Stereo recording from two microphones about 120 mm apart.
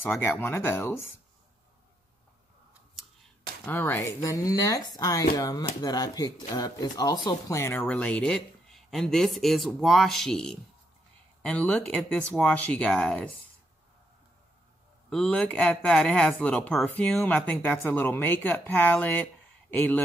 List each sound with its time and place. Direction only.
0.2 s speech: 20° left (ahead or behind)
3.6 s speech: 15° left (ahead or behind)
7.8 s speech: 10° left (ahead or behind)
15.0 s speech: 5° left (ahead or behind)
17.1 s speech: centre (ahead or behind)